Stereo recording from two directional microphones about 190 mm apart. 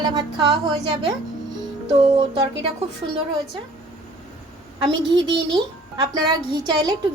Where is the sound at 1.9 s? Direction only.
30° right (ahead or behind).